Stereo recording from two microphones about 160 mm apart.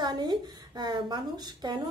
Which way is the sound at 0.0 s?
25° right (ahead or behind).